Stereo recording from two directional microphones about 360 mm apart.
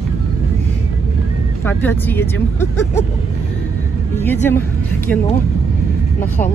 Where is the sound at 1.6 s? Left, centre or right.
Centre.